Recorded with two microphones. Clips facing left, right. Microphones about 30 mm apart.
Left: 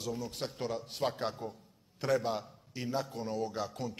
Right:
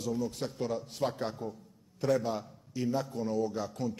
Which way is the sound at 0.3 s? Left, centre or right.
Left.